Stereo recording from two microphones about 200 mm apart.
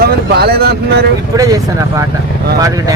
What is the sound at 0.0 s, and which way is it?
Speech, 50° right (ahead or behind).